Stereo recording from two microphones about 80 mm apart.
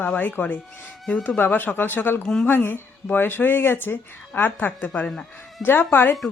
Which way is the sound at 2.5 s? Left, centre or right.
Left.